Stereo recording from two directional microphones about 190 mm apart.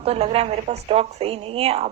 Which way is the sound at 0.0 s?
30° right (ahead or behind).